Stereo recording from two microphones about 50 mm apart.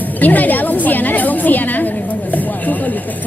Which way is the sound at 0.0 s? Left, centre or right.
Left.